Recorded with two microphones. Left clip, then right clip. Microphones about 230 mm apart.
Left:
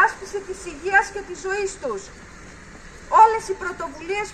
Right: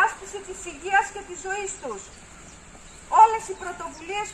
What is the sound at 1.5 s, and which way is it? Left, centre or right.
Speech, right.